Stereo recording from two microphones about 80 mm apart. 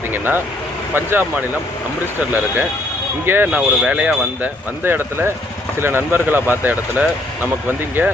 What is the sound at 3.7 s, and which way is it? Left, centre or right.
Speech, centre.